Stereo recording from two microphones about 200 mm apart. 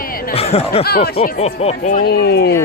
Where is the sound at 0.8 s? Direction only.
50° left (ahead or behind).